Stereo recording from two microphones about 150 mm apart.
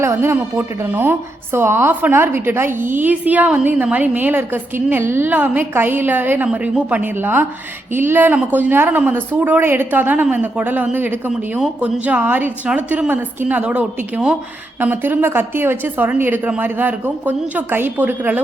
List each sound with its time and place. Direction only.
0.0 s a woman's voice: 15° right (ahead or behind)